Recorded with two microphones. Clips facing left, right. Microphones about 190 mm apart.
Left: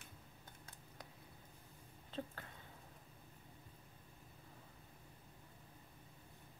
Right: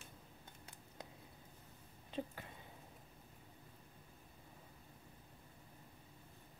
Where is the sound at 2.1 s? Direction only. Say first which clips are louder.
Right 3 dB; 15° right (ahead or behind).